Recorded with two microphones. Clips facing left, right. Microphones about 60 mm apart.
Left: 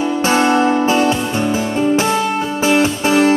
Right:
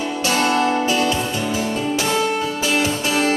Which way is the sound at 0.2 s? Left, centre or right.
Left.